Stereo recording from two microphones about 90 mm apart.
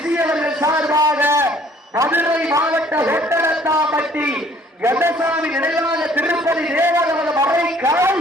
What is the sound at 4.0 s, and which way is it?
A man's voice, 15° right (ahead or behind).